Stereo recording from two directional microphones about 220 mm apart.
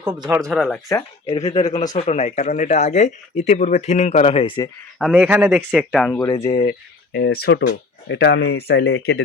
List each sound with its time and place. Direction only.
0.3 s speech: centre (ahead or behind)
1.3 s speech: 30° left (ahead or behind)
4.9 s a man's voice: 5° right (ahead or behind)
6.1 s speech: 15° left (ahead or behind)
6.7 s speech: 45° left (ahead or behind)